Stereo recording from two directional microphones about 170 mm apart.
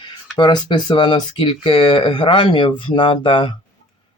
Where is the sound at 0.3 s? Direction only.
25° left (ahead or behind).